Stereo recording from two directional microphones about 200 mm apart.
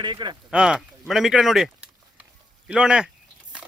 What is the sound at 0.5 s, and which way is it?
Speech, 5° right (ahead or behind).